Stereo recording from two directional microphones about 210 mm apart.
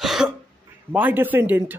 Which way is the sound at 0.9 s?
10° right (ahead or behind).